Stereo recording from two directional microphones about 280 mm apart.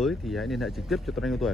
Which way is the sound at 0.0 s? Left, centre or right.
Centre.